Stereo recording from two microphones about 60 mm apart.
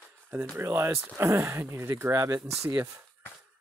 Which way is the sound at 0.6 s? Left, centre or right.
Right.